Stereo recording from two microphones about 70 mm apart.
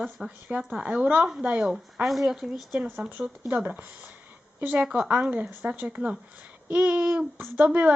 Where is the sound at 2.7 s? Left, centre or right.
Right.